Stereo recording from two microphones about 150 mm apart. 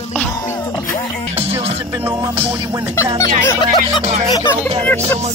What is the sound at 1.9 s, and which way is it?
Music, 20° right (ahead or behind).